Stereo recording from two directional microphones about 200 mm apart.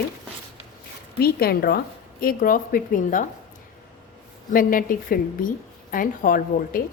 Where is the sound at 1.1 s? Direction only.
50° left (ahead or behind).